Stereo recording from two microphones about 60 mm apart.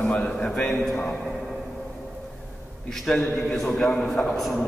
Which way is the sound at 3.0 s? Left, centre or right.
Centre.